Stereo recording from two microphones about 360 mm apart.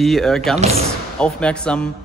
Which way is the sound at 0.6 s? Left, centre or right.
Centre.